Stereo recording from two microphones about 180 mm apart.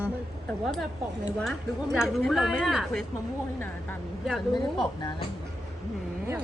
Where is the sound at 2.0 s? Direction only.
Centre (ahead or behind).